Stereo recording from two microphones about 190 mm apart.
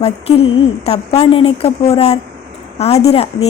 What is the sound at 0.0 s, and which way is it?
A woman's voice, 30° left (ahead or behind).